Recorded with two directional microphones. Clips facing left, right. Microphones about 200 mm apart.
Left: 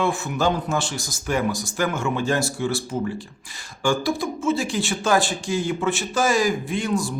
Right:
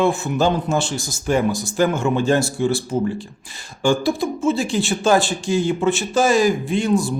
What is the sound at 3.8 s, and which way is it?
Speech, 25° right (ahead or behind).